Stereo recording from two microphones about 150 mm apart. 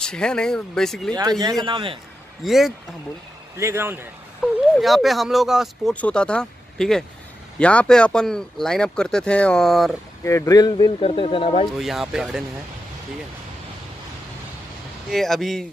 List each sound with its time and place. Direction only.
0.0 s speech: 5° left (ahead or behind)
1.4 s a man's voice: 25° right (ahead or behind)
2.4 s speech: centre (ahead or behind)
3.5 s speech: 15° right (ahead or behind)
4.4 s a sound: 10° right (ahead or behind)
4.7 s speech: centre (ahead or behind)
10.2 s speech: 20° left (ahead or behind)
11.1 s speech: 40° left (ahead or behind)
11.8 s speech: centre (ahead or behind)
15.0 s speech: centre (ahead or behind)